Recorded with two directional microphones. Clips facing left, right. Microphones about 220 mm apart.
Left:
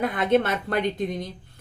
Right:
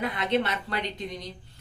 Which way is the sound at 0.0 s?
50° left (ahead or behind).